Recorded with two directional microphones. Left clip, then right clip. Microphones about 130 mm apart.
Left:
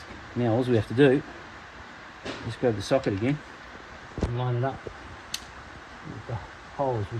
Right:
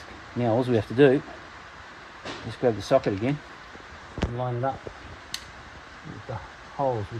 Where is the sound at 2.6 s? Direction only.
65° right (ahead or behind).